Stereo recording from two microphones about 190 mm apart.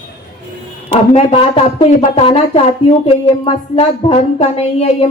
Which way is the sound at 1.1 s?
30° left (ahead or behind).